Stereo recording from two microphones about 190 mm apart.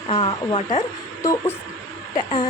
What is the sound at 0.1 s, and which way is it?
Speech, 25° left (ahead or behind).